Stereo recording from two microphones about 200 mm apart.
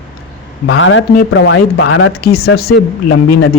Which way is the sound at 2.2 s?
50° left (ahead or behind).